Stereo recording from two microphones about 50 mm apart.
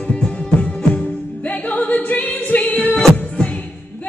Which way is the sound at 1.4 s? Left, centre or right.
Left.